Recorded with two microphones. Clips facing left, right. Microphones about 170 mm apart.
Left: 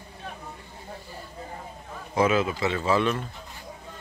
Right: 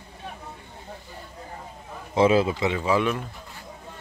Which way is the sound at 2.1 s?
30° right (ahead or behind).